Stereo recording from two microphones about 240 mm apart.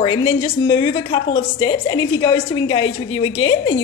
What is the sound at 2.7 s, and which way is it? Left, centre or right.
Speech, left.